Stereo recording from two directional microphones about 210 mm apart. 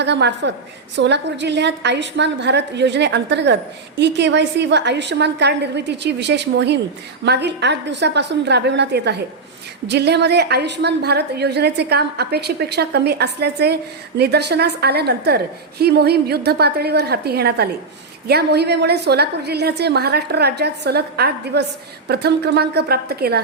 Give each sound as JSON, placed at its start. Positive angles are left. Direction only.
{"t": 0.0, "sound": "a woman's voice", "side_deg": -55}